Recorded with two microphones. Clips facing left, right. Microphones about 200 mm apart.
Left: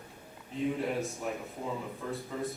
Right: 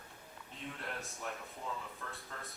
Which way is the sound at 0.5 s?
Centre (ahead or behind).